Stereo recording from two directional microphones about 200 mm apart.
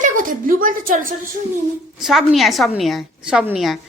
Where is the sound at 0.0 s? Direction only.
40° right (ahead or behind).